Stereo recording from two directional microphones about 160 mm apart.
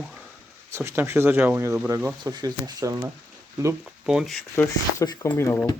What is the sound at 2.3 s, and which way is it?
Speech, 25° right (ahead or behind).